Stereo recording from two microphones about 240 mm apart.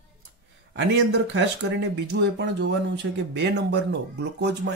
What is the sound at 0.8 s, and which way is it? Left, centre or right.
Speech, right.